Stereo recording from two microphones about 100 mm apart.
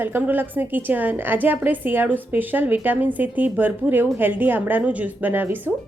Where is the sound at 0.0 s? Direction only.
20° right (ahead or behind).